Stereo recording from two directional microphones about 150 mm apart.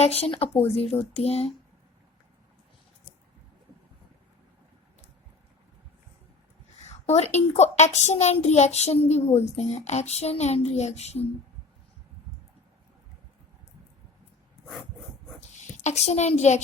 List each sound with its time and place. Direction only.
0.0 s speech: 40° left (ahead or behind)
6.8 s a child's voice: 45° left (ahead or behind)
15.4 s a woman's voice: 50° left (ahead or behind)